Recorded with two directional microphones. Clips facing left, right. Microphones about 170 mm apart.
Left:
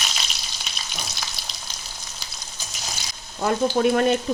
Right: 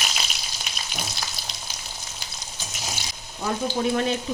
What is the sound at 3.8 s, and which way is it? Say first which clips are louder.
Speech: left 5 dB; 55° left (ahead or behind).